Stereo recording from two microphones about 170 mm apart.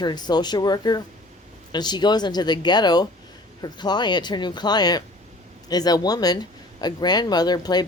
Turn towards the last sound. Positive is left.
turn(degrees=25)  # may be behind; listen again after turning